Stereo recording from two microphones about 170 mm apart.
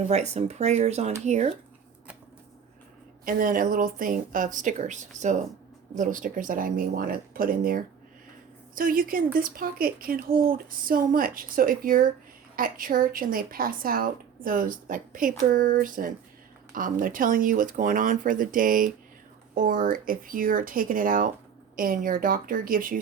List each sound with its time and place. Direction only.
0.1 s speech: 40° right (ahead or behind)
3.2 s speech: 55° right (ahead or behind)